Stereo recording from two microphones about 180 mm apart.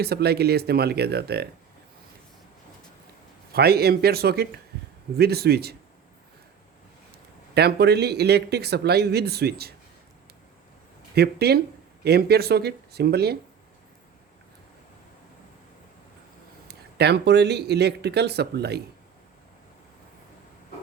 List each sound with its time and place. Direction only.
0.0 s speech: 60° right (ahead or behind)
3.5 s speech: 60° right (ahead or behind)
7.5 s speech: 65° right (ahead or behind)
11.1 s speech: 65° right (ahead or behind)
16.6 s speech: 65° right (ahead or behind)